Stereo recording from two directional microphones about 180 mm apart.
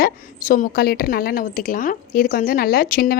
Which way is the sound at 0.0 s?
45° left (ahead or behind).